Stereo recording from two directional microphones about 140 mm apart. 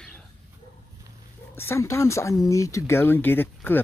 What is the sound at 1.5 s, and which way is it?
Speech, 20° left (ahead or behind).